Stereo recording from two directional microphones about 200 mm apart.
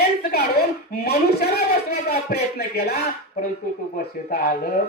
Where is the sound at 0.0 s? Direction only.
50° left (ahead or behind).